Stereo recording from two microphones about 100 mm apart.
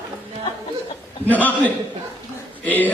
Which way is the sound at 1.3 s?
15° left (ahead or behind).